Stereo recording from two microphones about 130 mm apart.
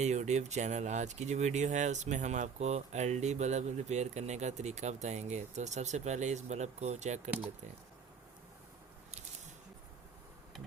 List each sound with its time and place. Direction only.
0.0 s speech: 60° right (ahead or behind)